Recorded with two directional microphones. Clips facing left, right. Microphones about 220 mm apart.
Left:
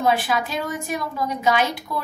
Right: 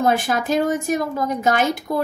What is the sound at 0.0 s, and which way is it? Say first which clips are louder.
A woman's voice: right 2 dB; 45° right (ahead or behind).